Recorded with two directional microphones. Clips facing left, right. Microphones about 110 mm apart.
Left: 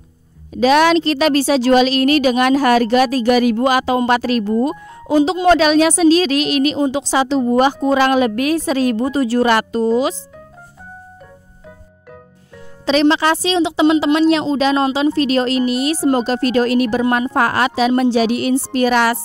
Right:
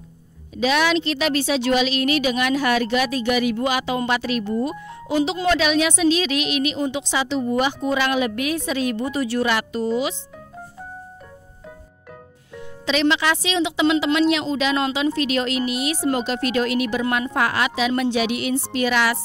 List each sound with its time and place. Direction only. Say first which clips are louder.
0.5 s a woman's voice: left 7 dB; 45° left (ahead or behind)
12.8 s a woman's voice: left 6 dB; 40° left (ahead or behind)